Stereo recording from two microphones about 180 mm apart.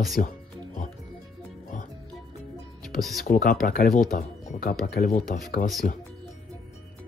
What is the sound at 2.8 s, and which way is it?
Music, centre (ahead or behind).